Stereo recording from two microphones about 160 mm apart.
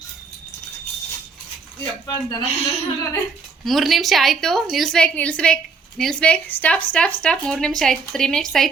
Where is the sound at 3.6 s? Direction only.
Centre (ahead or behind).